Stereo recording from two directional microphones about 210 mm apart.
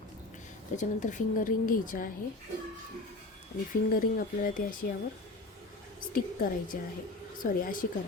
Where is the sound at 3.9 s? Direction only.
40° left (ahead or behind).